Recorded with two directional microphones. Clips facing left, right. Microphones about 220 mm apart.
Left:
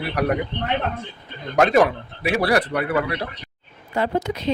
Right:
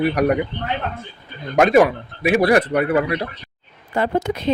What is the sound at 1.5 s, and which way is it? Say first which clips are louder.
Speech: right 3 dB; 15° right (ahead or behind).